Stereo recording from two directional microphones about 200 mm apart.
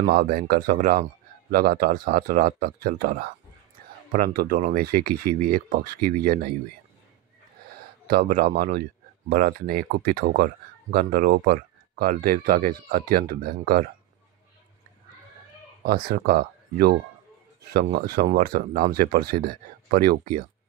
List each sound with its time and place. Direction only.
0.0 s speech: 50° right (ahead or behind)
8.1 s speech: 45° right (ahead or behind)
15.8 s speech: 50° right (ahead or behind)